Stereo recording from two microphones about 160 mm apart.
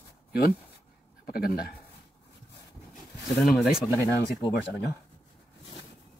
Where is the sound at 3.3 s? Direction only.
Centre (ahead or behind).